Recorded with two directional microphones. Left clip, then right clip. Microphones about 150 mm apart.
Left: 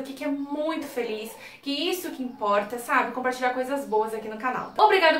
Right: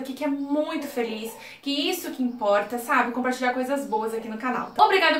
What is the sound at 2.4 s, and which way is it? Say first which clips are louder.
A woman's voice: right 2 dB; 5° right (ahead or behind).